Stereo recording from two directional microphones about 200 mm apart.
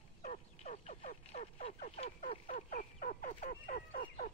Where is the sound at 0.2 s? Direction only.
35° left (ahead or behind).